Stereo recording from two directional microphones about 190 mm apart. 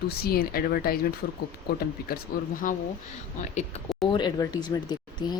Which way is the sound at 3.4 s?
40° left (ahead or behind).